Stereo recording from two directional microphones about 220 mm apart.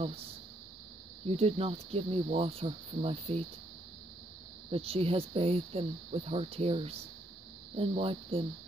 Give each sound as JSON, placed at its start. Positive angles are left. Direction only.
{"t": 1.2, "sound": "speech", "side_deg": -25}
{"t": 4.6, "sound": "speech", "side_deg": -25}